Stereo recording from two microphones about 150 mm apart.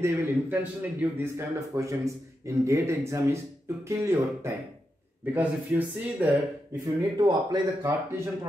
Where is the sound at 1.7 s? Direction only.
20° right (ahead or behind).